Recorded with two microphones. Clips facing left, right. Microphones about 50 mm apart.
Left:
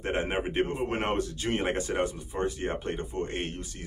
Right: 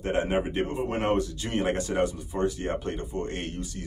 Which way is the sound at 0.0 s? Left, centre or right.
Left.